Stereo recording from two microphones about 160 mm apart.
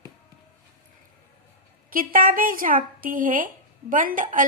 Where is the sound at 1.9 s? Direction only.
60° right (ahead or behind).